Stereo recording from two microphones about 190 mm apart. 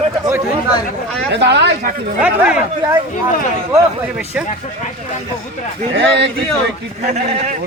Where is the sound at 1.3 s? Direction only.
65° right (ahead or behind).